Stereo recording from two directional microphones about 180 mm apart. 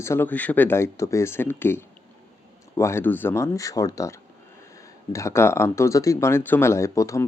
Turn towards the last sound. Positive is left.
turn(degrees=15)  # may be behind; listen again after turning